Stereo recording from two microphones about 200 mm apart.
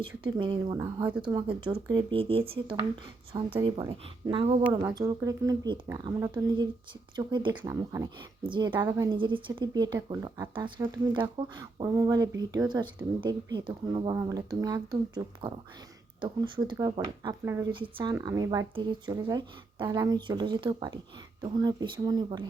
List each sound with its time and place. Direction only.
0.0 s speech: 25° right (ahead or behind)
1.0 s speech: 5° right (ahead or behind)
1.6 s speech: 25° right (ahead or behind)